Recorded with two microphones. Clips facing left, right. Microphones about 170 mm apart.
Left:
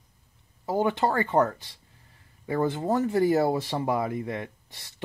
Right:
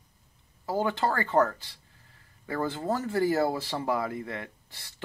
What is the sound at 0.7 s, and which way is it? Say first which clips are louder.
Speech: left 3 dB; 20° left (ahead or behind).